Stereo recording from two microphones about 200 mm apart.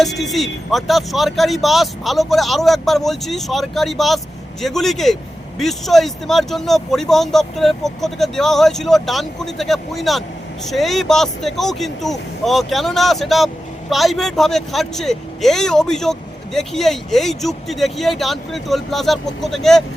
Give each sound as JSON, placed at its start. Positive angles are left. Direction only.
{"t": 0.0, "sound": "speech", "side_deg": 0}